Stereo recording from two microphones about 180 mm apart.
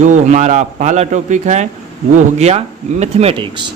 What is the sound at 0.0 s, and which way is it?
A man's voice, 45° right (ahead or behind).